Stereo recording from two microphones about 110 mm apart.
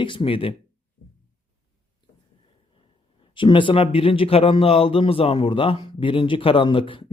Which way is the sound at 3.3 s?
50° left (ahead or behind).